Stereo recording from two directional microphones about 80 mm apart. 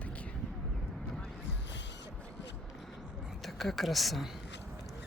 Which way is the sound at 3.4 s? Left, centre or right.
Centre.